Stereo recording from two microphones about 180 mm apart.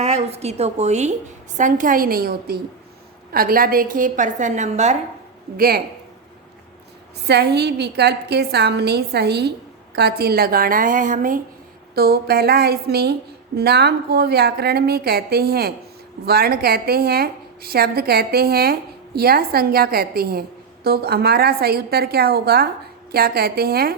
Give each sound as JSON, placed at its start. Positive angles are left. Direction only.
{"t": 0.0, "sound": "a woman's voice", "side_deg": -35}
{"t": 5.5, "sound": "a woman's voice", "side_deg": -55}
{"t": 7.3, "sound": "a woman's voice", "side_deg": -65}
{"t": 11.9, "sound": "a woman's voice", "side_deg": -60}